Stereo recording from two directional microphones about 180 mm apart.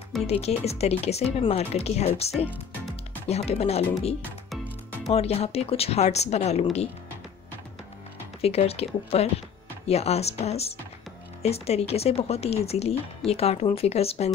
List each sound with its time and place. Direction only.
0.3 s speech: 35° left (ahead or behind)
5.1 s speech: 35° left (ahead or behind)
8.4 s speech: 35° left (ahead or behind)